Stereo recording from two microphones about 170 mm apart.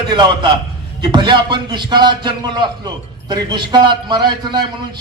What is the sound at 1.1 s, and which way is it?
A man's voice, 30° right (ahead or behind).